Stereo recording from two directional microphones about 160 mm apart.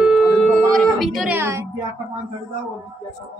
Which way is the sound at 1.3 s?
15° right (ahead or behind).